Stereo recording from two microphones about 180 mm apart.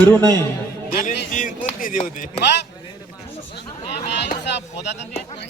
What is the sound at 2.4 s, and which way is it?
Speech, 70° left (ahead or behind).